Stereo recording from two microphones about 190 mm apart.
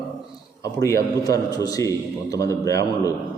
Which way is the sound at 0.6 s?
15° left (ahead or behind).